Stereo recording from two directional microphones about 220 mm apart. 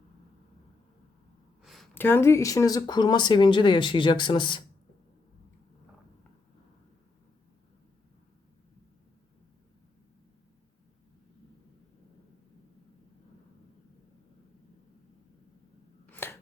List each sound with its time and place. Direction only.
1.6 s speech: centre (ahead or behind); by 4.6 s 20° left (ahead or behind)
16.1 s scissors: 10° left (ahead or behind)